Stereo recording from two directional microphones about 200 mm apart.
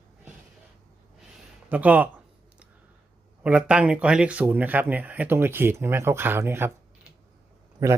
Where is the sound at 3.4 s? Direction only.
5° right (ahead or behind).